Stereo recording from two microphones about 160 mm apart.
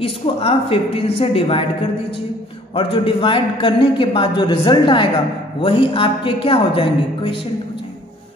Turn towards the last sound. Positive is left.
turn(degrees=35)  # may be behind; listen again after turning